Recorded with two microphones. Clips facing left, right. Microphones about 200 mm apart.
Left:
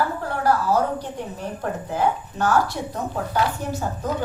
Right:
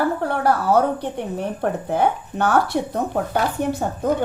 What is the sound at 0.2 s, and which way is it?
A woman's voice, 60° right (ahead or behind).